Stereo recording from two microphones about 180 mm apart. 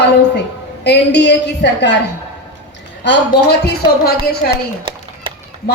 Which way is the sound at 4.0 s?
60° left (ahead or behind).